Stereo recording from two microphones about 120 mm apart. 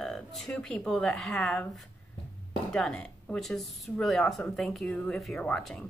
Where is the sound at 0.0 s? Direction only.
Centre (ahead or behind).